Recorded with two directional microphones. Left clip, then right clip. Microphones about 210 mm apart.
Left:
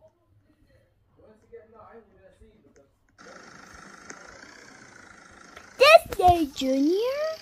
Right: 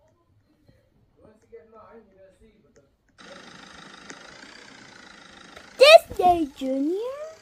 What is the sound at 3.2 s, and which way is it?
Roar, 25° right (ahead or behind).